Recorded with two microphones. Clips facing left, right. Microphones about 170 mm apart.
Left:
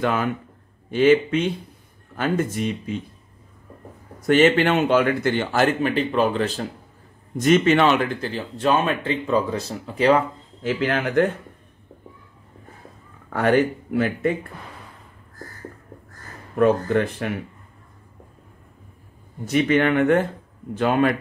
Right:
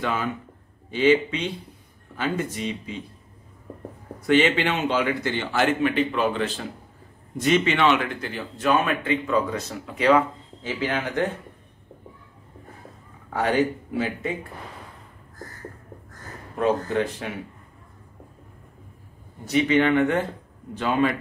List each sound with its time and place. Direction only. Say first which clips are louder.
0.0 s a man's voice: left 4 dB; 55° left (ahead or behind)
4.3 s a man's voice: left 4 dB; 45° left (ahead or behind)
13.3 s speech: left 3 dB; 55° left (ahead or behind)
16.5 s speech: left 4 dB; 55° left (ahead or behind)
19.4 s a man's voice: left 1 dB; 50° left (ahead or behind)